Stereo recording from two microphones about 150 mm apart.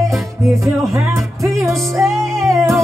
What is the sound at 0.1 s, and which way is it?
Music, centre (ahead or behind).